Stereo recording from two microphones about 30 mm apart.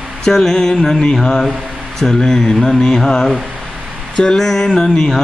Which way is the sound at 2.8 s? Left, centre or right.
Left.